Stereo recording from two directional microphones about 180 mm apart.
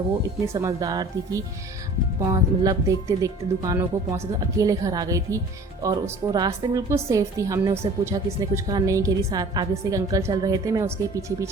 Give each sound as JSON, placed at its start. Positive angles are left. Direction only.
{"t": 0.6, "sound": "a woman's voice", "side_deg": -20}